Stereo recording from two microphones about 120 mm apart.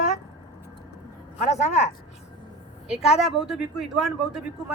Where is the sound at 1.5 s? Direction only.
65° left (ahead or behind).